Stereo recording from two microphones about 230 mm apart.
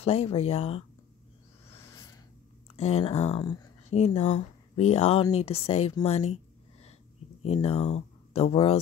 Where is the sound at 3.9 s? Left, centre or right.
Left.